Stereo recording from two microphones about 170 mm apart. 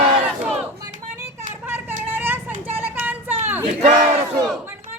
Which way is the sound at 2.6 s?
10° right (ahead or behind).